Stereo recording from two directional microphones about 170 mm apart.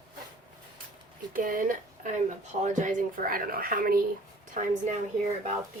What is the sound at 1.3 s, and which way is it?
A woman's voice, 55° right (ahead or behind).